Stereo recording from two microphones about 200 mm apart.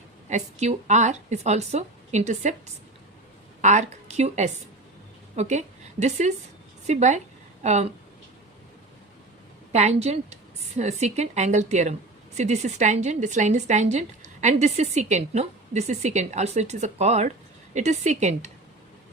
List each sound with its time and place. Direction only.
0.3 s a woman's voice: 35° right (ahead or behind)
3.6 s a woman's voice: 35° right (ahead or behind)
9.7 s a woman's voice: 35° right (ahead or behind)